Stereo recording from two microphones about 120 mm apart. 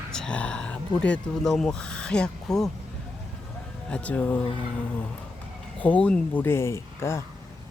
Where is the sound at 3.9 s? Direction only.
10° left (ahead or behind).